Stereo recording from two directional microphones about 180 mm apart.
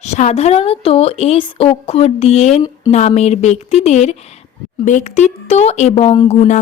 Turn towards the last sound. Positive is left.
turn(degrees=40)  # may be behind; listen again after turning